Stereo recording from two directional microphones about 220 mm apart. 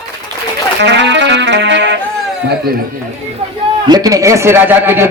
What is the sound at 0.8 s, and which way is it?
Music, 55° right (ahead or behind).